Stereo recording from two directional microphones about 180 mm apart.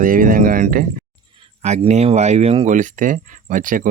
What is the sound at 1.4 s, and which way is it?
Speech, 35° right (ahead or behind).